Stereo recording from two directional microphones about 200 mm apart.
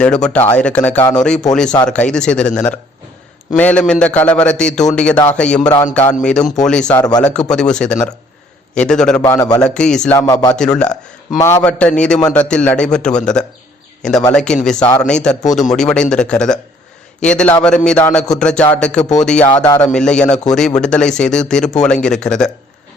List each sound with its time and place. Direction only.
0.0 s a man's voice: 5° left (ahead or behind)
9.2 s a man's voice: 15° left (ahead or behind)
9.6 s a man's voice: 5° left (ahead or behind)
10.2 s speech: 20° left (ahead or behind)
10.5 s a man's voice: 5° left (ahead or behind)